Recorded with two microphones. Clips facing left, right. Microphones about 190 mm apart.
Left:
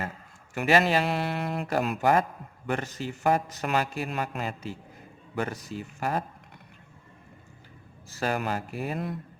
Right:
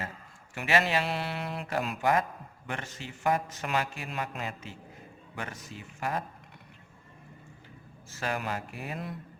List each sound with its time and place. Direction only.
0.5 s a man's voice: 40° left (ahead or behind)
1.0 s mantra: 50° left (ahead or behind)
2.0 s a man's voice: 40° left (ahead or behind)
8.1 s a man's voice: 35° left (ahead or behind)